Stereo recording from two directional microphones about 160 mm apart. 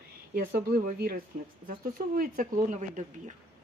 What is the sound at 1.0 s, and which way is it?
Speech, 70° right (ahead or behind).